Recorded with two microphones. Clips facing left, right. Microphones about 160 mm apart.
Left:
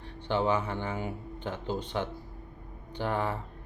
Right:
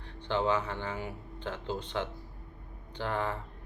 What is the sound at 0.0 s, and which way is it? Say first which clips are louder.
Speech: left 2 dB; 15° left (ahead or behind).